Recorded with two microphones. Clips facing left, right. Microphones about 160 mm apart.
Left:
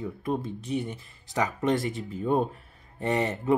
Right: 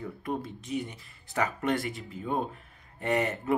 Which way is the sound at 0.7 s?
30° left (ahead or behind).